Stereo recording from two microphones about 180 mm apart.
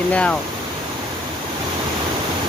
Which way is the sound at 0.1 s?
5° left (ahead or behind).